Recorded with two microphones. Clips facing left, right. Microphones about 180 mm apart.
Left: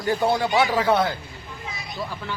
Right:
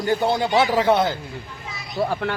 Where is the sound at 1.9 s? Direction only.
65° right (ahead or behind).